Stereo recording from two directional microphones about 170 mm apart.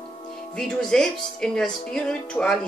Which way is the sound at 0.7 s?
5° left (ahead or behind).